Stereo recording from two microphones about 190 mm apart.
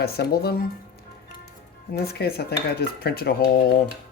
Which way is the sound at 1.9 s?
55° left (ahead or behind).